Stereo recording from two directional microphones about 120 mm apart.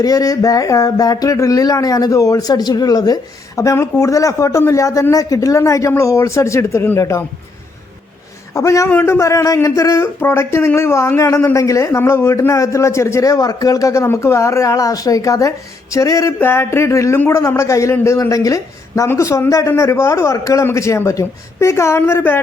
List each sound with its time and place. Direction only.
0.0 s speech: 30° left (ahead or behind)
8.5 s speech: 25° left (ahead or behind)